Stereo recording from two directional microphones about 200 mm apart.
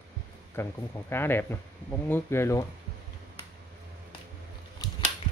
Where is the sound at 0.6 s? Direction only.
10° left (ahead or behind).